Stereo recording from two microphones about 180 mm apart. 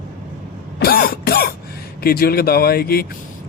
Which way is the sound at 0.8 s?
60° left (ahead or behind).